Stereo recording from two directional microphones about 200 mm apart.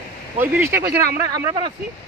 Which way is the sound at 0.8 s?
50° right (ahead or behind).